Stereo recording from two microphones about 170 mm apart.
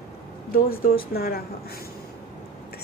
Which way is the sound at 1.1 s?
65° left (ahead or behind).